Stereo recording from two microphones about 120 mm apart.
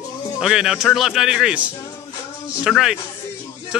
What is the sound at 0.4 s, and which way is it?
A man's voice, 5° right (ahead or behind).